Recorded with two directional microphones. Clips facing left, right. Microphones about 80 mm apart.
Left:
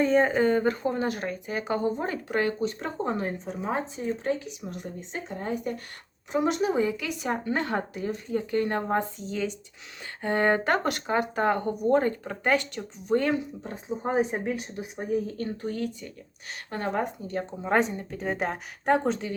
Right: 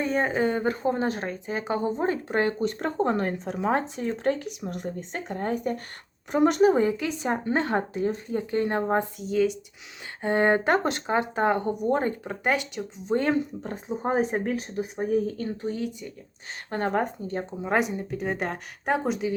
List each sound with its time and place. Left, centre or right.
0.0 s speech: centre
9.1 s speech: centre
10.2 s speech: right
13.3 s speech: right
15.6 s speech: centre
16.6 s speech: right
17.6 s speech: centre